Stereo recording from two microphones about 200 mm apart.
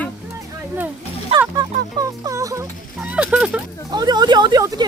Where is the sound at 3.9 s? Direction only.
20° right (ahead or behind).